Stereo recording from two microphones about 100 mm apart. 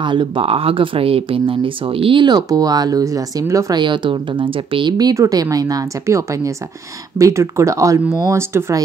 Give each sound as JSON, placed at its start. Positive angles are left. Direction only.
{"t": 0.0, "sound": "speech", "side_deg": -55}
{"t": 2.2, "sound": "speech", "side_deg": -40}
{"t": 3.7, "sound": "speech", "side_deg": -55}
{"t": 5.1, "sound": "speech", "side_deg": -35}